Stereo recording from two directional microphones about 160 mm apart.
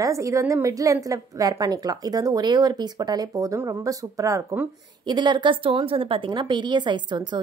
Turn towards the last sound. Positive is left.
turn(degrees=-30)  # may be behind; listen again after turning